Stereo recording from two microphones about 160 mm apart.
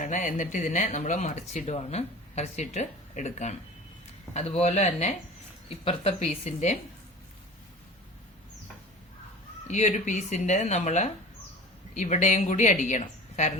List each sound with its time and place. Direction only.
0.0 s speech: 50° left (ahead or behind)
9.6 s speech: 45° left (ahead or behind)